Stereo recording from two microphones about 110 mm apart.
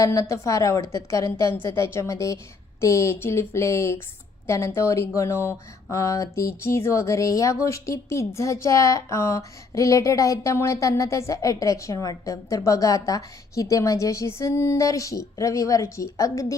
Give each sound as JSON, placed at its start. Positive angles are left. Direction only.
{"t": 0.0, "sound": "speech", "side_deg": 30}